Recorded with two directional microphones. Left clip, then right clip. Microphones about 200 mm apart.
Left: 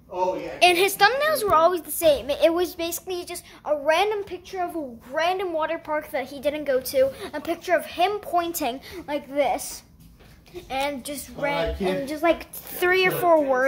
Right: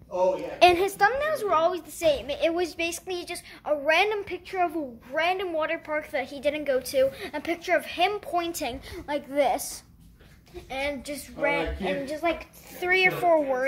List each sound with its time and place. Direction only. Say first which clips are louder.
0.7 s a woman's voice: left 4 dB; centre (ahead or behind)
5.1 s a woman's voice: left 2 dB; centre (ahead or behind)
10.7 s a woman's voice: left 3 dB; 10° left (ahead or behind)
12.1 s a woman's voice: left 5 dB; 20° left (ahead or behind)
12.9 s a woman's voice: left 1 dB; 10° left (ahead or behind)